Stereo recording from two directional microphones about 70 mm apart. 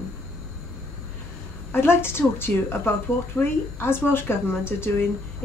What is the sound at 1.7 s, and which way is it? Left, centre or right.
Speech, left.